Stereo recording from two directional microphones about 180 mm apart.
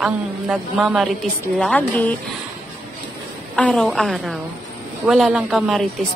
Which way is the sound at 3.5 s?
5° left (ahead or behind).